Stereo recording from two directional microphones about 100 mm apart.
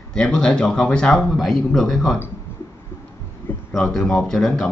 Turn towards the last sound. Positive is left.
turn(degrees=5)  # may be behind; listen again after turning